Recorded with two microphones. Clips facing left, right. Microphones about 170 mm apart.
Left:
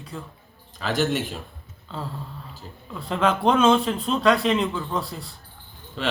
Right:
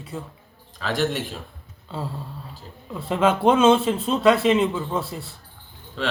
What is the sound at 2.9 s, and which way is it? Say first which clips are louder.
Speech: right 2 dB; 5° right (ahead or behind).